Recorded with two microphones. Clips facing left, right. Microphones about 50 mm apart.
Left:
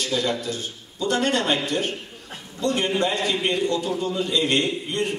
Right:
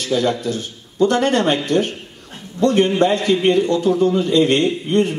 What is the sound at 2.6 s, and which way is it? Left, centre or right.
A man's voice, right.